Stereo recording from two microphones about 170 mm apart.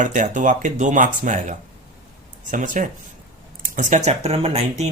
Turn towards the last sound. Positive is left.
turn(degrees=-40)  # may be behind; listen again after turning